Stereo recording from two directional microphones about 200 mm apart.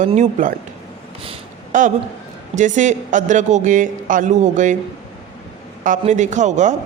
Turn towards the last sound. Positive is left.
turn(degrees=-35)  # may be behind; listen again after turning